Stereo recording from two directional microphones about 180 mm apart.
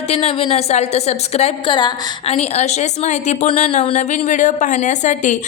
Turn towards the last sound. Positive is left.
turn(degrees=40)  # may be behind; listen again after turning